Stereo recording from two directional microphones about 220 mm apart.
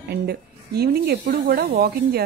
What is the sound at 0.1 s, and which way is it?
Speech, 45° right (ahead or behind).